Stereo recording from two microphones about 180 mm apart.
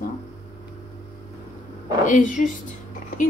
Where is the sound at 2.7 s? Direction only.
45° left (ahead or behind).